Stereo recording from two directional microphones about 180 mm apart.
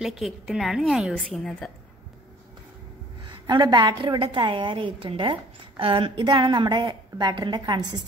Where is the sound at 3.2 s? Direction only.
25° right (ahead or behind).